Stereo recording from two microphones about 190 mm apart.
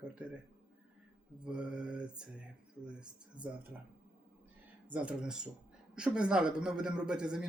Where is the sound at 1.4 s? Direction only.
5° right (ahead or behind).